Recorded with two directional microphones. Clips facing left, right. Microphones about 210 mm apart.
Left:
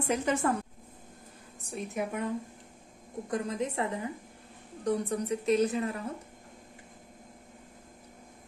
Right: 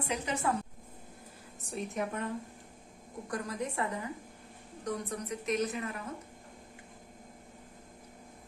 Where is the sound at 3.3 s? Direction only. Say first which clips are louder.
Left 4 dB; 20° left (ahead or behind).